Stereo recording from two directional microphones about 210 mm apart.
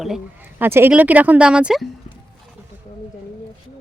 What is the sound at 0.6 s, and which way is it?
Speech, 10° right (ahead or behind).